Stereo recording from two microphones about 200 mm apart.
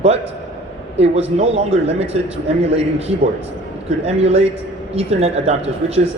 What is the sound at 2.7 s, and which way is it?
Speech, 30° right (ahead or behind).